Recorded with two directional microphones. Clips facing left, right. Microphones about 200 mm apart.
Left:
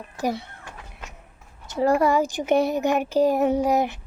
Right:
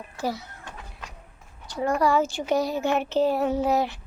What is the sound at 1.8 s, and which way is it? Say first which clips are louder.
Speech: left 5 dB; 35° left (ahead or behind).